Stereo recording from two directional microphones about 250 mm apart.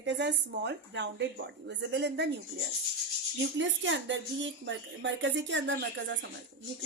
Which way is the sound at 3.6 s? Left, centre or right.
Right.